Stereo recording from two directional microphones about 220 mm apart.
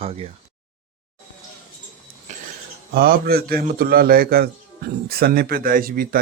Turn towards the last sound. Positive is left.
turn(degrees=-40)  # may be behind; listen again after turning